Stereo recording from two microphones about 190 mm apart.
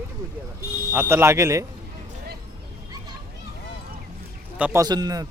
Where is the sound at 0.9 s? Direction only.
10° right (ahead or behind).